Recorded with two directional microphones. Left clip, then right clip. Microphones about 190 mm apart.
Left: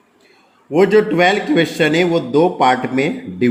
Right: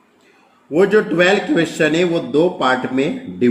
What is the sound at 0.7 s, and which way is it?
A man's voice, 40° left (ahead or behind).